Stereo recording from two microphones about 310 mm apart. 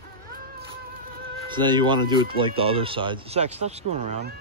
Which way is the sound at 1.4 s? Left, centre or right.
Centre.